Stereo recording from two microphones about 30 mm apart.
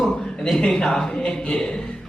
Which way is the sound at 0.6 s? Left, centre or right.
Left.